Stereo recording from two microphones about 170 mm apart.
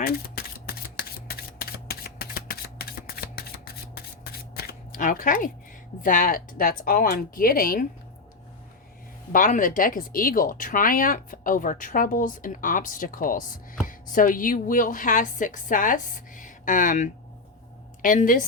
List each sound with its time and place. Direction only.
0.0 s shuffling cards: 60° left (ahead or behind)
3.9 s a sound: 65° left (ahead or behind)
6.0 s speech: 55° left (ahead or behind)
9.3 s speech: 50° left (ahead or behind)